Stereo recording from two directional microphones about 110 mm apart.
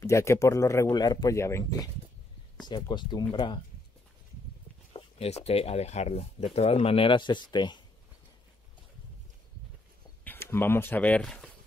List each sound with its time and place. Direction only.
0.0 s speech: 25° left (ahead or behind)
2.6 s speech: 45° left (ahead or behind)
4.9 s speech: 65° left (ahead or behind); by 7.8 s 45° left (ahead or behind)
10.2 s speech: 20° left (ahead or behind)